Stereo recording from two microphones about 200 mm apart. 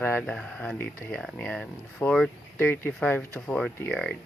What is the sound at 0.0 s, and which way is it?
Speech, 10° left (ahead or behind).